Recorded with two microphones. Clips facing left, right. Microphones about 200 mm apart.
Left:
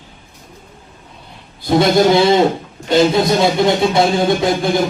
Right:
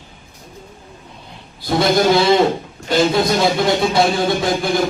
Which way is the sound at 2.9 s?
20° left (ahead or behind).